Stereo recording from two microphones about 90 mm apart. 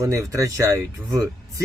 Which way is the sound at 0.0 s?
35° right (ahead or behind).